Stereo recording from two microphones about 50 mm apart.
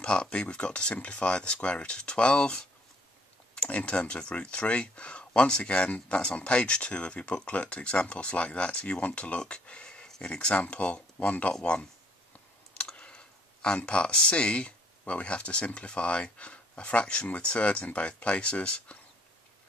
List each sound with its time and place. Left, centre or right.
0.0 s speech: left
10.2 s speech: left
12.7 s clicking: left
13.7 s speech: left